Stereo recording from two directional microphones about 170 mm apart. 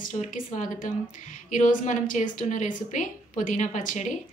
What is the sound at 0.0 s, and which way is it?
A woman's voice, 50° left (ahead or behind).